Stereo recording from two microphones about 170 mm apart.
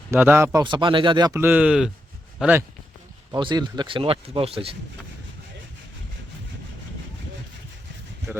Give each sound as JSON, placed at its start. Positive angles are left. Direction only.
{"t": 0.1, "sound": "speech", "side_deg": -15}
{"t": 0.6, "sound": "speech", "side_deg": -30}
{"t": 1.4, "sound": "speech", "side_deg": -10}
{"t": 3.3, "sound": "speech", "side_deg": -25}